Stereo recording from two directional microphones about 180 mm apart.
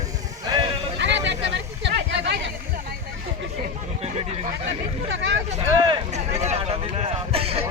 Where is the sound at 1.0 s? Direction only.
75° right (ahead or behind).